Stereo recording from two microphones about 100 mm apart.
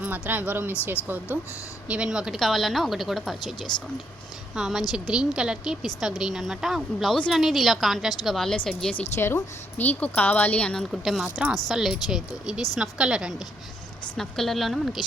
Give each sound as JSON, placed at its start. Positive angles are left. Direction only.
{"t": 0.0, "sound": "a woman's voice", "side_deg": -20}
{"t": 9.1, "sound": "speech", "side_deg": 25}
{"t": 11.0, "sound": "a woman's voice", "side_deg": 0}
{"t": 14.2, "sound": "speech", "side_deg": 5}